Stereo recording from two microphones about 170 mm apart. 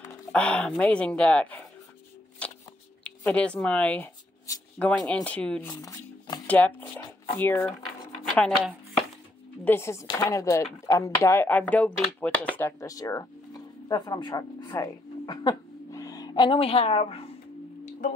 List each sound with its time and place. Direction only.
0.3 s speech: 5° left (ahead or behind)
3.0 s speech: 5° left (ahead or behind)
5.7 s shuffling cards: 20° left (ahead or behind)
6.4 s speech: 10° left (ahead or behind)
8.3 s speech: centre (ahead or behind)
9.7 s speech: 15° left (ahead or behind); by 17.2 s 35° left (ahead or behind)